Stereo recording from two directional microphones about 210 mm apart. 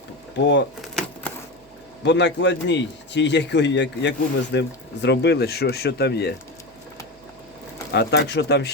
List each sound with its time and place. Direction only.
0.3 s a man's voice: 55° left (ahead or behind)
0.8 s a sound: 5° left (ahead or behind)
2.0 s a man's voice: 55° left (ahead or behind)
7.9 s speech: 55° left (ahead or behind)